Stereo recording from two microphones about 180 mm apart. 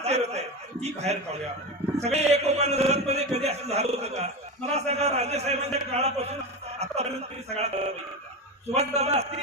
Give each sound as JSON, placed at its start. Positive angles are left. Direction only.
{"t": 0.0, "sound": "a sound", "side_deg": -35}
{"t": 2.0, "sound": "a man's voice", "side_deg": -35}
{"t": 6.7, "sound": "music", "side_deg": -35}
{"t": 7.5, "sound": "a man's voice", "side_deg": -35}